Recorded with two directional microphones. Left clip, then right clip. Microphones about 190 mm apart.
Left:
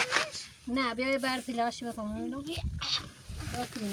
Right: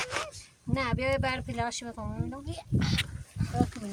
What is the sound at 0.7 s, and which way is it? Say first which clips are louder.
Speech: right 1 dB; 35° right (ahead or behind).